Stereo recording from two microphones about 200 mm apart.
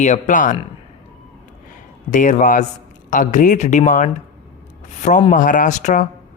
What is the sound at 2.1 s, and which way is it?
Speech, 40° left (ahead or behind).